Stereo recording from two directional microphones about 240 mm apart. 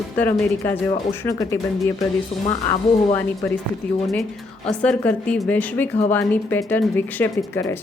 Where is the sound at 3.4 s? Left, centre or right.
Centre.